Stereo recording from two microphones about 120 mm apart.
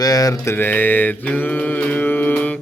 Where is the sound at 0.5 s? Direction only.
15° left (ahead or behind).